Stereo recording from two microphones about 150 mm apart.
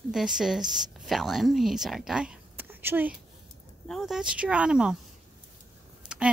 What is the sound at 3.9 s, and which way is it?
Speech, centre (ahead or behind).